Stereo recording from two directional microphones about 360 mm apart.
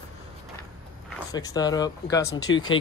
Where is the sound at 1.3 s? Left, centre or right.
Centre.